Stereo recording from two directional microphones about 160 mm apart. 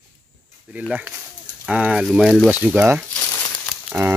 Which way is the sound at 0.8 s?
5° right (ahead or behind).